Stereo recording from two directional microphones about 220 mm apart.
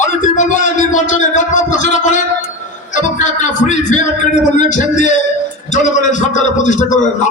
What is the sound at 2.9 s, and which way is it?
A man's voice, 35° left (ahead or behind).